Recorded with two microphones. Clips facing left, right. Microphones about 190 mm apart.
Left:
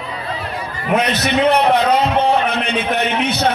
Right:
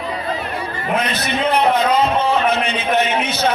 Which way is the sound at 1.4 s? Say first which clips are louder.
Left 1 dB; 70° left (ahead or behind).